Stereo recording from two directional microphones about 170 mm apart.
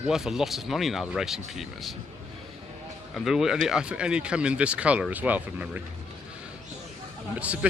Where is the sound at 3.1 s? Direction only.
Centre (ahead or behind).